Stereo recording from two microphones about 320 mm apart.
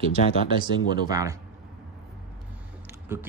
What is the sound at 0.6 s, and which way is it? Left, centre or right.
Speech, centre.